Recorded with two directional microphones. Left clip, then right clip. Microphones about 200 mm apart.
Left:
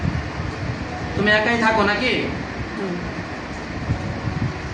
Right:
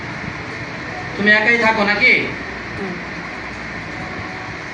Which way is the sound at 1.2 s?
20° left (ahead or behind).